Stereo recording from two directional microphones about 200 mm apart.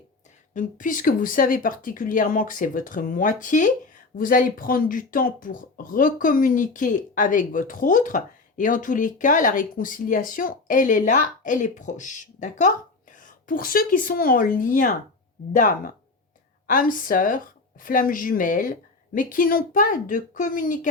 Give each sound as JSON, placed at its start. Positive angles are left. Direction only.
{"t": 0.5, "sound": "speech", "side_deg": 40}